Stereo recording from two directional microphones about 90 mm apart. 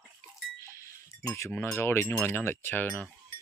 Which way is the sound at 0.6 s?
35° left (ahead or behind).